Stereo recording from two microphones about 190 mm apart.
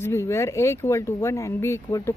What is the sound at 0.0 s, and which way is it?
Speech, 15° left (ahead or behind).